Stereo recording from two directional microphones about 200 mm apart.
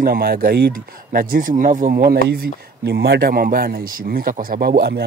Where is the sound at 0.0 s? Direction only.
50° right (ahead or behind).